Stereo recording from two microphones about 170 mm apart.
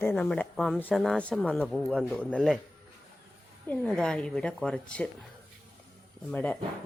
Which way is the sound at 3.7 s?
5° left (ahead or behind).